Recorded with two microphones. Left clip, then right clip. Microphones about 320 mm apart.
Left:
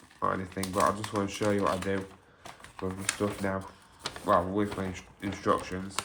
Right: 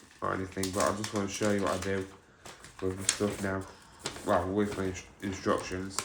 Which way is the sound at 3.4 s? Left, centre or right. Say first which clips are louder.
Left 2 dB; left.